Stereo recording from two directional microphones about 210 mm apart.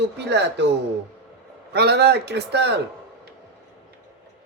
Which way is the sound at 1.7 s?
50° right (ahead or behind).